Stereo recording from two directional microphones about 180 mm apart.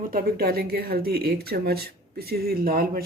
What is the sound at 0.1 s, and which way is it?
Speech, 55° right (ahead or behind).